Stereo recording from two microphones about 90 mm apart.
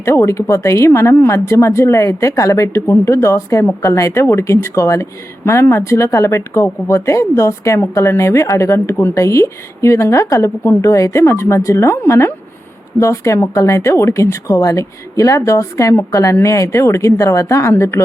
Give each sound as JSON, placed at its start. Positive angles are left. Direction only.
{"t": 0.0, "sound": "speech", "side_deg": 30}